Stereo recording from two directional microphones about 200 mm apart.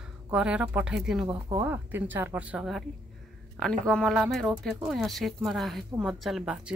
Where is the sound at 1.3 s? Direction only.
25° right (ahead or behind).